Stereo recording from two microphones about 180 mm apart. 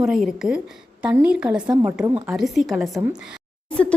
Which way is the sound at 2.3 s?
Centre (ahead or behind).